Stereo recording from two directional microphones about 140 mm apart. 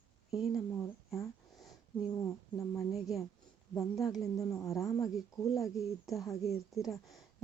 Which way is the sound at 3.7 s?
25° left (ahead or behind).